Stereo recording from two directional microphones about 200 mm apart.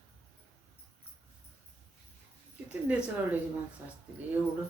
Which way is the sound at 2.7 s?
5° right (ahead or behind).